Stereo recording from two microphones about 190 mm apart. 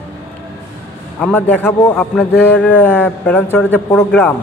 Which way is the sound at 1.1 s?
10° left (ahead or behind).